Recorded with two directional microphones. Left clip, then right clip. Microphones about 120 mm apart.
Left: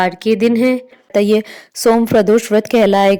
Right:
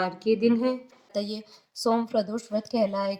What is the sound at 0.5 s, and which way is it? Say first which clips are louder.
Speech: left 12 dB; 50° left (ahead or behind).